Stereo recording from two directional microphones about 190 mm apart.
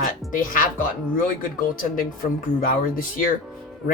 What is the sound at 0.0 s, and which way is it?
Speech, 45° left (ahead or behind).